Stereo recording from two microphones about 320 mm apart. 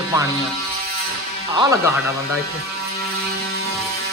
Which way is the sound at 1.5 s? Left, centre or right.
Centre.